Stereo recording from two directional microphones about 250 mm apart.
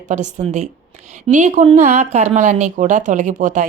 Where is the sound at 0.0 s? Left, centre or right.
Right.